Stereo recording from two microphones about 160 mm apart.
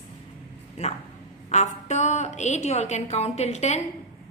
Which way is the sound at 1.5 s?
45° left (ahead or behind).